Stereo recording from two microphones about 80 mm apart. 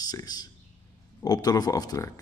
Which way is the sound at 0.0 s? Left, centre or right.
Left.